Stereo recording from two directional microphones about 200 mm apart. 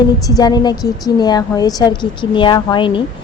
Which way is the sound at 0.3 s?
20° left (ahead or behind).